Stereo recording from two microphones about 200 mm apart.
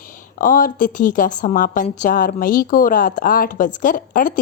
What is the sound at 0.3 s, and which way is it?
A woman's voice, 40° left (ahead or behind).